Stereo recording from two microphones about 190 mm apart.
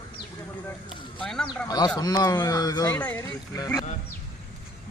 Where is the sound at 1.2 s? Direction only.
5° left (ahead or behind).